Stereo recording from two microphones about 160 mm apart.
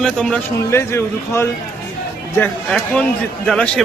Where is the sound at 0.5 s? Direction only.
15° left (ahead or behind).